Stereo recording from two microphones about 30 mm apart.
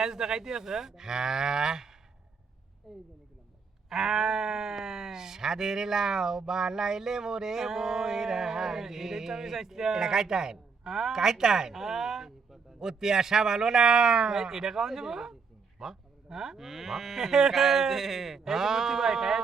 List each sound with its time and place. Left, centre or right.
0.0 s speech: centre
2.9 s speech: centre
3.8 s speech: centre
15.8 s a sound: centre
16.6 s speech: centre